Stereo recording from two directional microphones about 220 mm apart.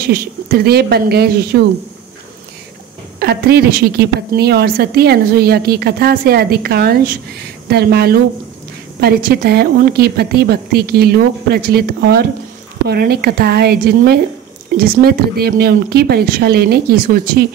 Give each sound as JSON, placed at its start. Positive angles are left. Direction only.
{"t": 0.0, "sound": "a woman's voice", "side_deg": -45}
{"t": 3.2, "sound": "a woman's voice", "side_deg": -45}